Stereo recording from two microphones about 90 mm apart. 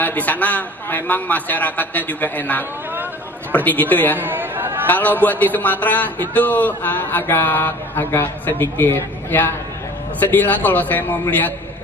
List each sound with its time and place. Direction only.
0.0 s a man's voice: 20° left (ahead or behind)
4.2 s chatter: 20° right (ahead or behind)
4.8 s a man's voice: 20° left (ahead or behind)